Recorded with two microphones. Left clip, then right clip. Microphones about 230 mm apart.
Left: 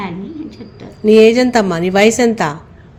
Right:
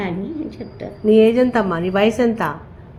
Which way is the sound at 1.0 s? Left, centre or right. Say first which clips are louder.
Left 5 dB; left.